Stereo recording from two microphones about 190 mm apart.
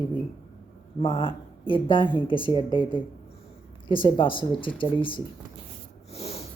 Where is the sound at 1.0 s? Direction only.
25° left (ahead or behind).